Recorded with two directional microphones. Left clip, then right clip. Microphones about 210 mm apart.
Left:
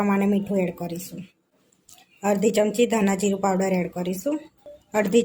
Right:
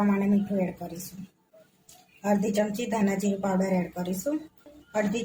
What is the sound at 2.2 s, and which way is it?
A woman's voice, 40° left (ahead or behind).